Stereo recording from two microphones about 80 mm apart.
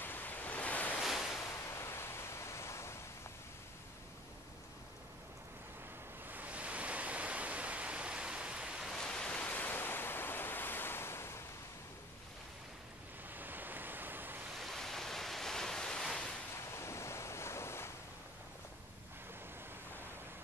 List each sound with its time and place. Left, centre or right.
0.0 s waves: left
1.0 s waves: centre
1.7 s pink noise: left
6.2 s pink noise: right
8.9 s waves: centre; by 11.4 s left
13.3 s waves: right
14.5 s waves: centre
16.5 s waves: left